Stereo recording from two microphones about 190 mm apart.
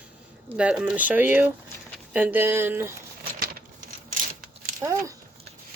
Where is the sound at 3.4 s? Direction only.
50° right (ahead or behind).